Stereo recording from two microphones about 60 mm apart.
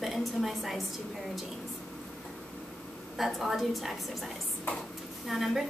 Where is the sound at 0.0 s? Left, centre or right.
Centre.